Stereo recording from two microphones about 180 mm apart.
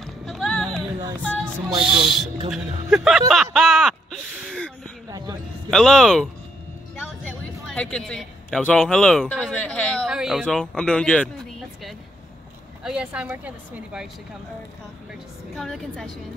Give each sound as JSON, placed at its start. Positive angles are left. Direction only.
{"t": 0.0, "sound": "music", "side_deg": 0}
{"t": 1.2, "sound": "speech", "side_deg": 5}
{"t": 3.5, "sound": "a sound", "side_deg": 0}
{"t": 5.1, "sound": "a sound", "side_deg": -20}
{"t": 5.7, "sound": "speech", "side_deg": 0}
{"t": 7.6, "sound": "speech", "side_deg": 5}
{"t": 12.8, "sound": "a woman's voice", "side_deg": -5}
{"t": 15.5, "sound": "speech", "side_deg": 0}